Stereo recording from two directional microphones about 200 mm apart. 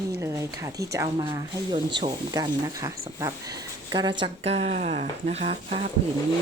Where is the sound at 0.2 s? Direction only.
15° right (ahead or behind); by 5.9 s 30° right (ahead or behind).